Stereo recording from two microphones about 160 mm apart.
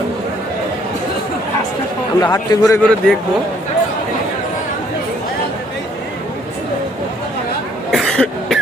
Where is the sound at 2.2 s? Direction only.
20° left (ahead or behind).